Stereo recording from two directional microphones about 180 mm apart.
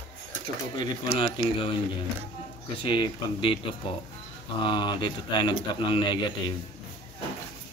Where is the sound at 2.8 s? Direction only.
30° left (ahead or behind).